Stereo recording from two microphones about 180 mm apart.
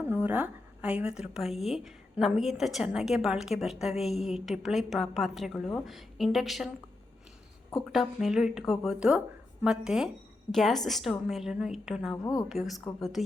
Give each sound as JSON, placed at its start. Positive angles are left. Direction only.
{"t": 0.0, "sound": "a woman's voice", "side_deg": -10}
{"t": 7.7, "sound": "a woman's voice", "side_deg": 0}
{"t": 12.1, "sound": "a woman's voice", "side_deg": 20}
{"t": 12.5, "sound": "a woman's voice", "side_deg": 0}